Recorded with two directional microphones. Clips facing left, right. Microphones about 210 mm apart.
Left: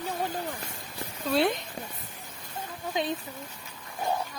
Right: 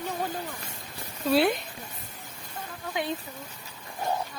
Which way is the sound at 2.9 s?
20° left (ahead or behind).